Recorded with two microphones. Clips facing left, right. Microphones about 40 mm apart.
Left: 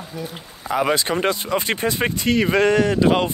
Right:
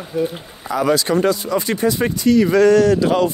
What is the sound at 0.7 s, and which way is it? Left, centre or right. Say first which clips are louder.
Speech: right 3 dB; left.